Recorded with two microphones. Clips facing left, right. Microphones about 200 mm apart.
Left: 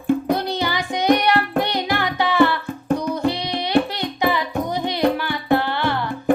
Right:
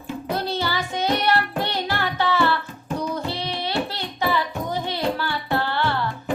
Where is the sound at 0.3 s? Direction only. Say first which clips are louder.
Left 2 dB; 15° left (ahead or behind).